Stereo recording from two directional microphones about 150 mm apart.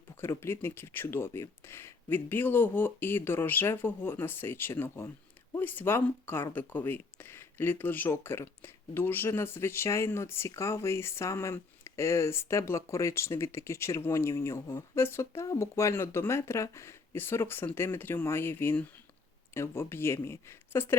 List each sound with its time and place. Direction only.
0.2 s speech: 15° left (ahead or behind)